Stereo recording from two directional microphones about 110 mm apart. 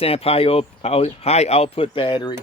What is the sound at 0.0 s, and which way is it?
Speech, 60° left (ahead or behind).